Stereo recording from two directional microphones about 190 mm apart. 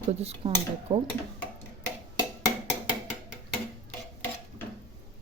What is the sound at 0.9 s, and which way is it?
Speech, 25° right (ahead or behind).